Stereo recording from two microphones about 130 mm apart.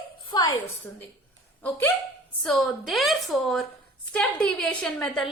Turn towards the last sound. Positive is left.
turn(degrees=5)  # may be behind; listen again after turning